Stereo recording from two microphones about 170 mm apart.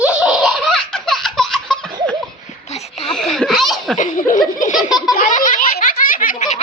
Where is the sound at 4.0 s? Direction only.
50° left (ahead or behind).